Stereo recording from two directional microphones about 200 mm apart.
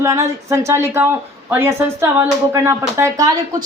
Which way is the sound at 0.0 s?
15° right (ahead or behind).